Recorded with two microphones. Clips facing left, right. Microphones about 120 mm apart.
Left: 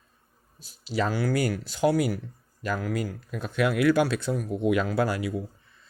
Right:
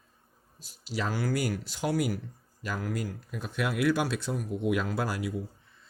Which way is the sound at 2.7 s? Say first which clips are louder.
Even; 85° left.